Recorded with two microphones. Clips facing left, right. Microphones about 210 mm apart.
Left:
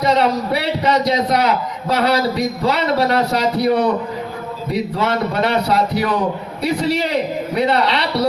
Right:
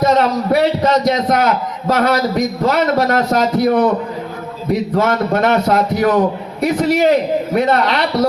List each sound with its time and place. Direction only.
0.0 s a man's voice: 45° right (ahead or behind)
4.9 s a man's voice: 45° right (ahead or behind)